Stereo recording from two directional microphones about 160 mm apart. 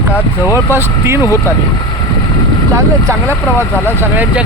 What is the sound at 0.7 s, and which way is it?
Speech, 15° right (ahead or behind).